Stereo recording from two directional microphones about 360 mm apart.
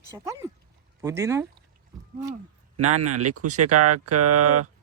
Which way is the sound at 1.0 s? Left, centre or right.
Centre.